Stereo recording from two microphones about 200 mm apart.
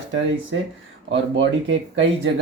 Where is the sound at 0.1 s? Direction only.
70° right (ahead or behind).